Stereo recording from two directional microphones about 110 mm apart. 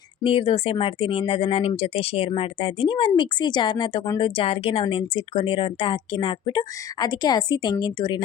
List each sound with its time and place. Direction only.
0.2 s speech: 55° left (ahead or behind); by 4.2 s 40° left (ahead or behind)
4.2 s speech: 55° left (ahead or behind)